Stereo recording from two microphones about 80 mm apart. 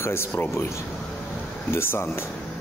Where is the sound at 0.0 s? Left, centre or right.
Left.